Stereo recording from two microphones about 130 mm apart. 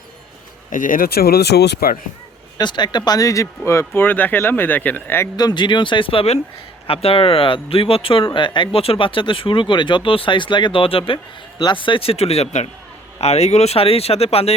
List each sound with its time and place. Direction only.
0.7 s speech: 85° left
2.6 s speech: 35° left (ahead or behind); by 5.3 s 15° left (ahead or behind)
5.4 s speech: 35° left (ahead or behind); by 14.5 s 50° left (ahead or behind)